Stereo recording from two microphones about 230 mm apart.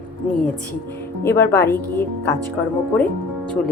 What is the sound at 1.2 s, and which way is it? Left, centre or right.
Speech, centre.